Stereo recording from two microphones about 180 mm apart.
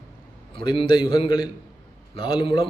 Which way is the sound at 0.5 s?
30° left (ahead or behind).